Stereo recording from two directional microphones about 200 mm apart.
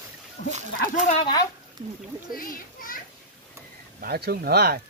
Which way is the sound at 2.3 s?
45° left (ahead or behind).